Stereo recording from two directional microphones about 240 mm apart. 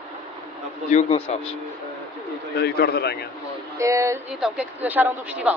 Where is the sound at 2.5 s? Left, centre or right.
Left.